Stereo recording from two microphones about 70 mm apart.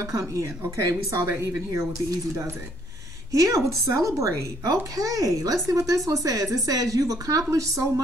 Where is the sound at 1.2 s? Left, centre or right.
Right.